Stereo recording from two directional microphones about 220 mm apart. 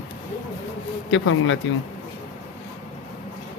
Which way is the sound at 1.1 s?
60° left (ahead or behind).